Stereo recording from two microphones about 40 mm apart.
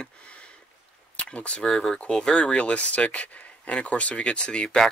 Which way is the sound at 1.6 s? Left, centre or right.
Centre.